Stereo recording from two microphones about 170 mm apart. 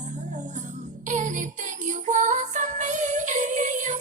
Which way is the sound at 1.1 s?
45° right (ahead or behind).